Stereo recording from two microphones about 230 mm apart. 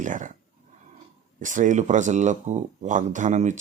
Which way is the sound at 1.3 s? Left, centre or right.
Right.